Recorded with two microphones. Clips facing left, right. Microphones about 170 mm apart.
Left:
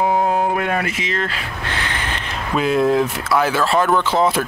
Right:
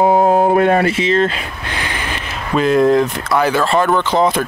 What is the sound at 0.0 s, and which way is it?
Speech, 40° right (ahead or behind).